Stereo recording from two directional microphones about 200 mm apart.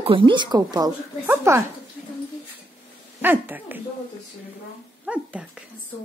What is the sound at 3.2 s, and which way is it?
Speech, 10° right (ahead or behind).